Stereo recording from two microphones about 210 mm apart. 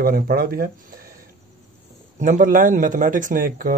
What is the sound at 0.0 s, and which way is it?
Speech, 45° right (ahead or behind).